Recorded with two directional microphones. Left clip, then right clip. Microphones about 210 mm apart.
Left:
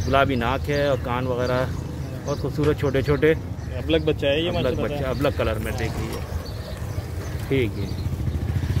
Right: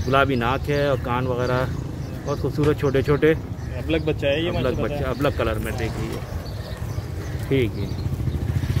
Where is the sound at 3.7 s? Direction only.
30° left (ahead or behind).